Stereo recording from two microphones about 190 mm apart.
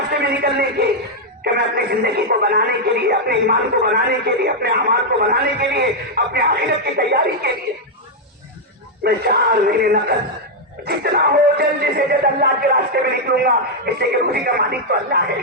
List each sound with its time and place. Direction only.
0.1 s speech: 60° right (ahead or behind)
9.0 s speech: 55° right (ahead or behind)